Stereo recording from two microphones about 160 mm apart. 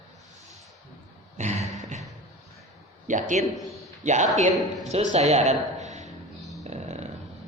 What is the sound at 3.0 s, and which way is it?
A man's voice, 50° right (ahead or behind).